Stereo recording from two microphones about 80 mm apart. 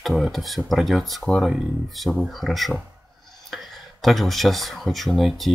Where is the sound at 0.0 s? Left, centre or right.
Centre.